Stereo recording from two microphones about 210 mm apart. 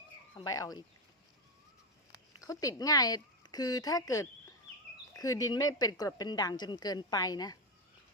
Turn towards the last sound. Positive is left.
turn(degrees=20)  # may be behind; listen again after turning